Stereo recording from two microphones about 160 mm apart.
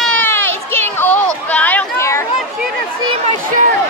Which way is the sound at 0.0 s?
10° left (ahead or behind).